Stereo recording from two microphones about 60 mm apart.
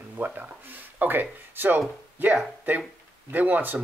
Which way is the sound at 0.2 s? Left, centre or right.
Right.